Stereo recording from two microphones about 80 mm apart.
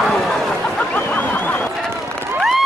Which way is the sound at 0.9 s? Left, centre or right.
Left.